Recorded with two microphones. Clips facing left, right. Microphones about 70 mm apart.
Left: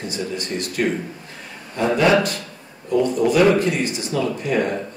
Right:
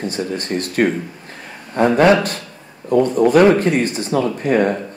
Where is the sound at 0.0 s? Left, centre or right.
Right.